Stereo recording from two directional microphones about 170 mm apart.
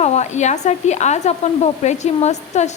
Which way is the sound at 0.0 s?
40° left (ahead or behind).